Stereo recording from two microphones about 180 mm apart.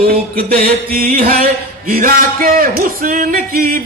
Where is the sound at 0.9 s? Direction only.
50° right (ahead or behind).